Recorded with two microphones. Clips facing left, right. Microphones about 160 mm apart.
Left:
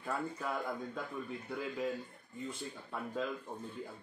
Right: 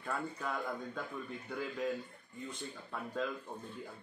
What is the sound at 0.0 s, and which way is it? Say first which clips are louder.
Speech: left 1 dB; 5° left (ahead or behind).